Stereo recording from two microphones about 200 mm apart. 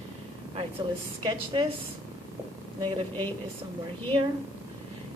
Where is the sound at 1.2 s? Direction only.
20° right (ahead or behind).